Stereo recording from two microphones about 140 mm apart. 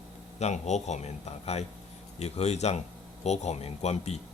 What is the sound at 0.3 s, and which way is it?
A man's voice, 55° left (ahead or behind).